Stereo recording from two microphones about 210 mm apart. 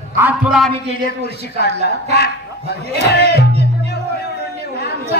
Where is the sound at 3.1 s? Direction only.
50° left (ahead or behind).